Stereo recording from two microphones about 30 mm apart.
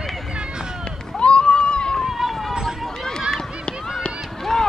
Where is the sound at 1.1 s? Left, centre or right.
Left.